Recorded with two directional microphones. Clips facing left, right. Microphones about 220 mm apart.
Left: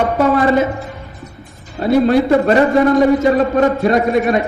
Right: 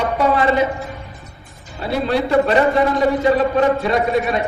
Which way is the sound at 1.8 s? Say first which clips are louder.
Left 7 dB; 45° left (ahead or behind).